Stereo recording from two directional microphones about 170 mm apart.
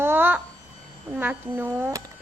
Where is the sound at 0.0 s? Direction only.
10° right (ahead or behind).